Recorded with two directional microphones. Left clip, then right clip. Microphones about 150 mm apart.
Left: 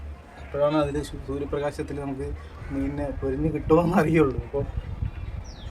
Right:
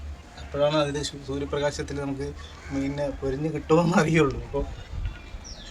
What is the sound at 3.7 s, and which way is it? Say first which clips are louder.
Speech: left 1 dB; 20° left (ahead or behind).